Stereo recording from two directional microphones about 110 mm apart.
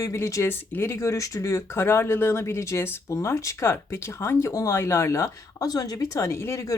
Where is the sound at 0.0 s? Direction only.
25° left (ahead or behind).